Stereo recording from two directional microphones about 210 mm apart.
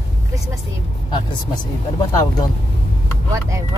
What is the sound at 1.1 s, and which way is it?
Speech, 20° left (ahead or behind).